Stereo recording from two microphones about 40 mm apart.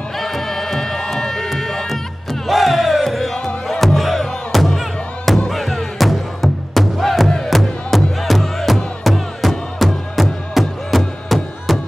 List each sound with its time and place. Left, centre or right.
0.2 s music: centre
1.5 s run: centre
2.4 s crowd: centre
3.8 s music: centre